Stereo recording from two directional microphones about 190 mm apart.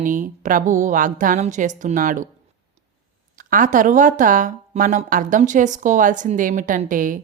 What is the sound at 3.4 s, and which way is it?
Speech, 45° right (ahead or behind).